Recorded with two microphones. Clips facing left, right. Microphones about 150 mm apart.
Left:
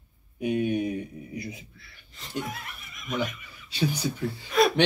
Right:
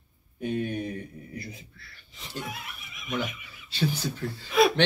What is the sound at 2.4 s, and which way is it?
Speech, 5° right (ahead or behind).